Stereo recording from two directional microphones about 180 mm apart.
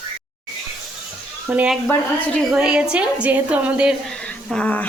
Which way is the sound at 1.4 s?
5° right (ahead or behind).